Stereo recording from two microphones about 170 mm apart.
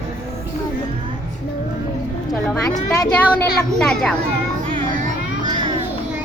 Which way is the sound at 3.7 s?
5° left (ahead or behind).